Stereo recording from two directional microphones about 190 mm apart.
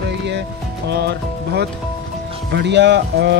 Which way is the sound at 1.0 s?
60° right (ahead or behind).